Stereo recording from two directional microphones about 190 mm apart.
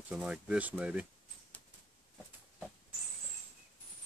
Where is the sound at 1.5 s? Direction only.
10° left (ahead or behind).